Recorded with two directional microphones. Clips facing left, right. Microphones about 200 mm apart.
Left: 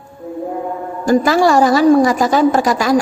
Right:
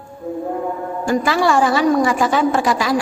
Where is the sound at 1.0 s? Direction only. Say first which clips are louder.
Left 5 dB; 40° left (ahead or behind).